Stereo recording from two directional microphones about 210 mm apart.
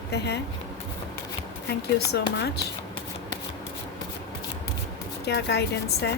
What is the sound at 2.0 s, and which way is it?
Speech, 50° left (ahead or behind).